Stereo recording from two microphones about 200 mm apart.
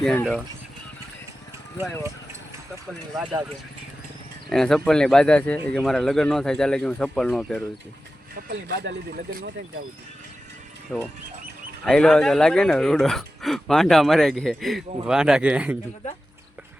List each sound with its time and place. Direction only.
0.0 s speech: centre (ahead or behind)
4.4 s speech: centre (ahead or behind)
8.4 s speech: 50° right (ahead or behind)
10.9 s speech: 10° left (ahead or behind); by 15.8 s 5° right (ahead or behind)